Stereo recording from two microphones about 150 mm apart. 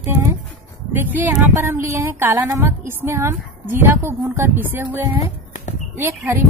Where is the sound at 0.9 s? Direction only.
10° right (ahead or behind).